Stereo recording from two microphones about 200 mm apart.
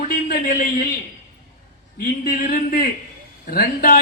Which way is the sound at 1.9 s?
50° left (ahead or behind).